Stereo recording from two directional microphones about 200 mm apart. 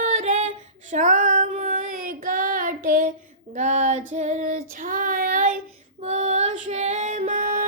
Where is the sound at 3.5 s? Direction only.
35° right (ahead or behind).